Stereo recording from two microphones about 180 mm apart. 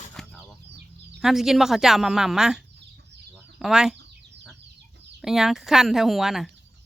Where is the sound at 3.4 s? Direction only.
5° right (ahead or behind).